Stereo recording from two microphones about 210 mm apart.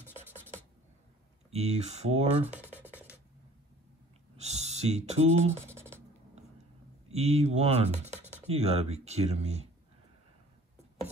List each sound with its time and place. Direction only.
0.0 s scratch: 10° right (ahead or behind)
1.5 s speech: 30° right (ahead or behind)
2.6 s music: 10° right (ahead or behind)
4.4 s speech: 30° right (ahead or behind)
5.7 s music: 10° right (ahead or behind)
7.1 s speech: 30° right (ahead or behind)